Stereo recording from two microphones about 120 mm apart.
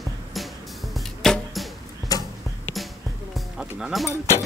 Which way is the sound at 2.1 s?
30° left (ahead or behind).